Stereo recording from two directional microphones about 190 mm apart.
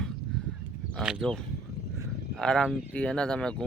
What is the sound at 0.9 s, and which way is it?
Speech, centre (ahead or behind).